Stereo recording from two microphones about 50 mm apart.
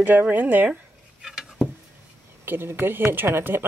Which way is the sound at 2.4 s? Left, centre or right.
Right.